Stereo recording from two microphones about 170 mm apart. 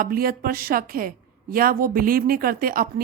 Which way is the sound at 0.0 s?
60° right (ahead or behind).